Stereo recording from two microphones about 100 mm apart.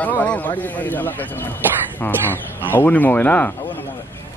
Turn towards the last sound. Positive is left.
turn(degrees=15)  # may be behind; listen again after turning